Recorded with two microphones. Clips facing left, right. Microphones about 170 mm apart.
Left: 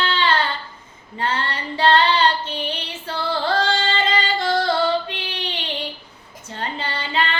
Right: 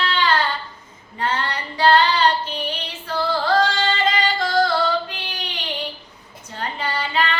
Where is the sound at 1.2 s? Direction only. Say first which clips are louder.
Even; 30° left (ahead or behind).